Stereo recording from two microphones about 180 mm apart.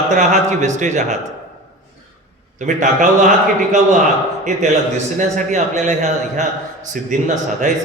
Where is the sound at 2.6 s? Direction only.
45° right (ahead or behind).